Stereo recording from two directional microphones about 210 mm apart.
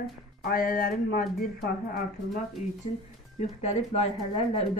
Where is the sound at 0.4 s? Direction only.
45° left (ahead or behind).